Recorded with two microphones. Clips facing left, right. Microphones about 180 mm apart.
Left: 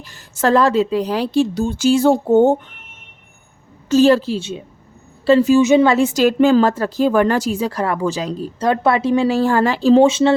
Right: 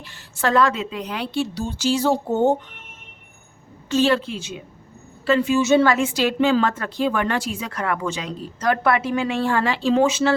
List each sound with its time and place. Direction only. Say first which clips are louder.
0.0 s speech: left 5 dB; 40° left (ahead or behind)
3.8 s a woman's voice: left 7 dB; 40° left (ahead or behind)
5.5 s a woman's voice: left 5 dB; 20° left (ahead or behind)
6.0 s speech: left 6 dB; 40° left (ahead or behind); by 10.3 s 25° left (ahead or behind)